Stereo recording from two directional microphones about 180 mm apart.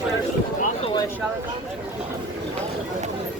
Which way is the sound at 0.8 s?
20° left (ahead or behind).